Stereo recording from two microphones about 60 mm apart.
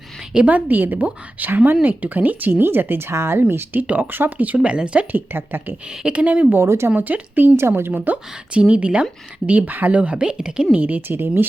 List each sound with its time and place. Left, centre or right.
0.3 s a woman's voice: right
5.1 s speech: right
6.0 s a woman's voice: centre
6.6 s speech: right
6.9 s a woman's voice: right; by 10.8 s centre
10.8 s speech: right